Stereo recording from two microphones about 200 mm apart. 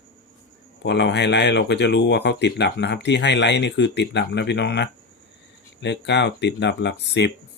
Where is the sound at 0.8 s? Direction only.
60° left (ahead or behind).